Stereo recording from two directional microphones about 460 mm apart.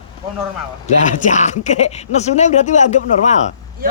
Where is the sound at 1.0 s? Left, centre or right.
Centre.